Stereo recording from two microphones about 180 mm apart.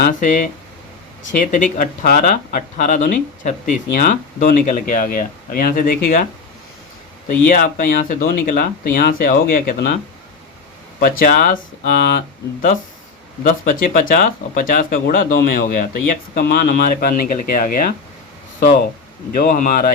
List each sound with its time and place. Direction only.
0.0 s speech: 45° left (ahead or behind)
7.3 s speech: 50° left (ahead or behind)
11.2 s speech: 50° left (ahead or behind)
13.4 s speech: 50° left (ahead or behind)
19.4 s speech: 50° left (ahead or behind)